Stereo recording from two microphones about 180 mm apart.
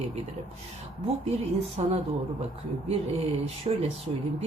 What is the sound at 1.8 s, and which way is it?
Speech, 40° right (ahead or behind).